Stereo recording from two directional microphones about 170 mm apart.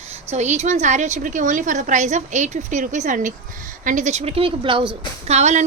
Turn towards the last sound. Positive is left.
turn(degrees=-40)  # may be behind; listen again after turning